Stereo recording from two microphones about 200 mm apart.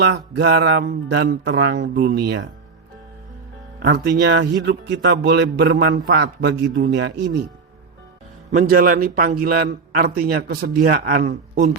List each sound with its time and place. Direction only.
0.0 s mantra: 60° right (ahead or behind)
3.8 s mantra: 55° right (ahead or behind)
8.4 s a man's voice: 40° right (ahead or behind)
11.3 s speech: 35° right (ahead or behind)